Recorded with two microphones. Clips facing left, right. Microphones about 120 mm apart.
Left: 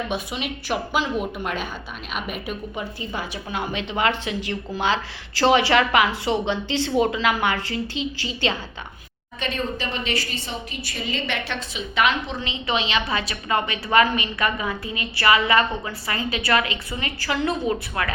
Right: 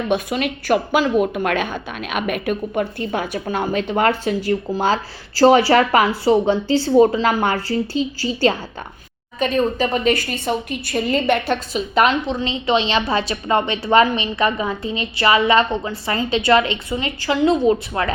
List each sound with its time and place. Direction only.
0.1 s a woman's voice: 50° right (ahead or behind)
12.3 s a woman's voice: 25° right (ahead or behind)